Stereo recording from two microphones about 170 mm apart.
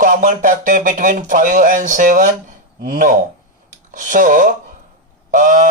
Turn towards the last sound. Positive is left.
turn(degrees=-50)  # may be behind; listen again after turning